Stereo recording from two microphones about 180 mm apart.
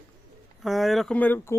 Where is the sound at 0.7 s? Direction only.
Centre (ahead or behind).